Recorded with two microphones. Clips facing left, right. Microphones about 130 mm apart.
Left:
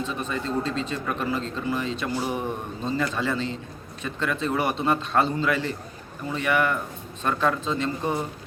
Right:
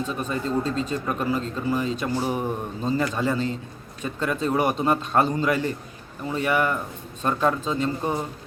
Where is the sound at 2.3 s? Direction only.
10° right (ahead or behind).